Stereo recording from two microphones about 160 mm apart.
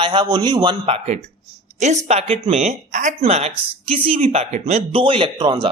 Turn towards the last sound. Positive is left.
turn(degrees=-35)  # may be behind; listen again after turning